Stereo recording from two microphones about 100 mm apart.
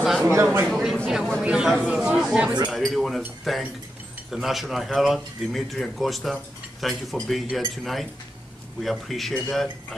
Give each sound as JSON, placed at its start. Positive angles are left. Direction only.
{"t": 0.3, "sound": "speech", "side_deg": -25}
{"t": 1.0, "sound": "speech", "side_deg": 0}